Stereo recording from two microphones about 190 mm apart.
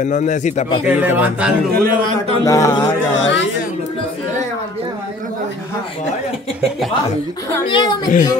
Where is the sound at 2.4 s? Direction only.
15° left (ahead or behind).